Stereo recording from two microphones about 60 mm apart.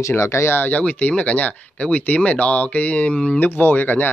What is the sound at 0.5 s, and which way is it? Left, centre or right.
Speech, left.